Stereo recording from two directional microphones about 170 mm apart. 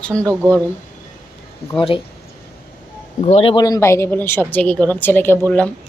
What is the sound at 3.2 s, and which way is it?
Speech, 40° left (ahead or behind).